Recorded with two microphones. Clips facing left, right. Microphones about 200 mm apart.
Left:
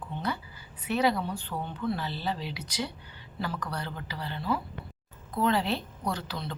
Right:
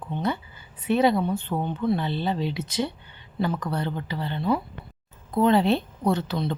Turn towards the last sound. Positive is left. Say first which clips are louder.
# right 9 dB
turn(degrees=-25)  # may be behind; listen again after turning